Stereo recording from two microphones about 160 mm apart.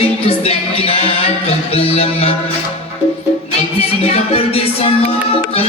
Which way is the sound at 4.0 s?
40° left (ahead or behind).